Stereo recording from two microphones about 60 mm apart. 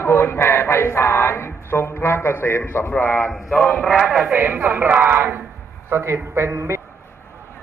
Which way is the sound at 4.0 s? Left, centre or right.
Centre.